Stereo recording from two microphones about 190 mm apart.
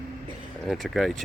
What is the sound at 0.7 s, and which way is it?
Speech, centre (ahead or behind).